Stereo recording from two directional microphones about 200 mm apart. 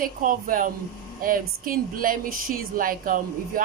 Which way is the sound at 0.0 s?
45° right (ahead or behind).